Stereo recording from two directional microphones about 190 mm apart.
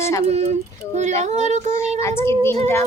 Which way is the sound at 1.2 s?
35° right (ahead or behind).